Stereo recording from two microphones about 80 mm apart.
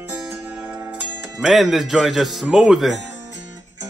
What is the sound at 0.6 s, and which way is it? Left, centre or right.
Music, centre.